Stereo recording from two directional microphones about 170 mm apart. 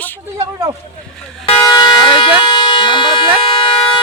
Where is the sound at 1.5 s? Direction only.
25° left (ahead or behind).